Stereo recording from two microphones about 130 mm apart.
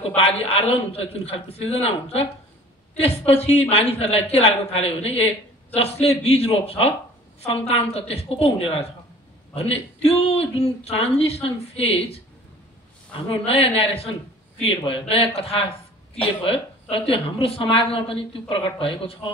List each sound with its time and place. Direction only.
0.2 s speech: 50° left (ahead or behind)
13.5 s speech: 50° left (ahead or behind)
16.9 s speech: 45° left (ahead or behind)